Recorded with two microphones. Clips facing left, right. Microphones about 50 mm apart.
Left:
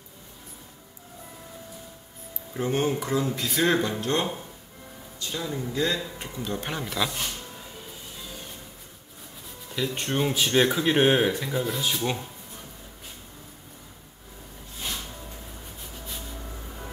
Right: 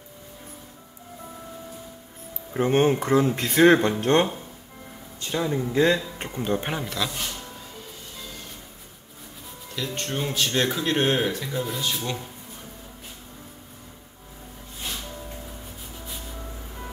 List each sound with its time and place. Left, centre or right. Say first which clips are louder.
2.5 s speech: right 5 dB; right
6.8 s speech: even; centre
9.9 s speech: left 1 dB; centre
12.0 s speech: left 2 dB; centre